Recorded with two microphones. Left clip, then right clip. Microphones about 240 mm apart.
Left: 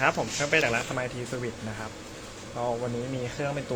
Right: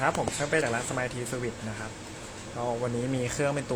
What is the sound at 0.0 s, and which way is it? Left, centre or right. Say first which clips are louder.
Speech: left 2 dB; centre.